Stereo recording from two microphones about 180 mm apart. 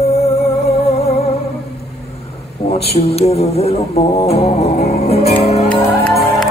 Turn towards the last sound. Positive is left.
turn(degrees=30)  # may be behind; listen again after turning